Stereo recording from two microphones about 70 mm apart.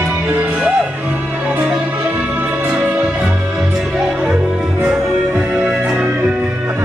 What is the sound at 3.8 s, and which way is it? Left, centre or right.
Music, centre.